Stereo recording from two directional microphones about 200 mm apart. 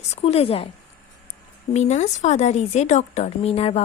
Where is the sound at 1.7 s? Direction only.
35° left (ahead or behind).